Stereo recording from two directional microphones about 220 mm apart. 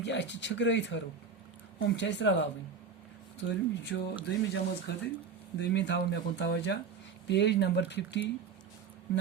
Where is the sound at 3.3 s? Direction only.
50° left (ahead or behind).